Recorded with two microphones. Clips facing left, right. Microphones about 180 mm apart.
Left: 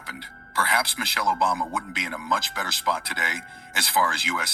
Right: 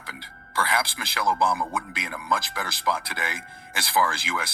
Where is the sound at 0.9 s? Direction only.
20° left (ahead or behind).